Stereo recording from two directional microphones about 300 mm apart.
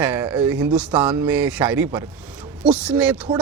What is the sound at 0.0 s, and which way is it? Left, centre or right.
Speech, centre.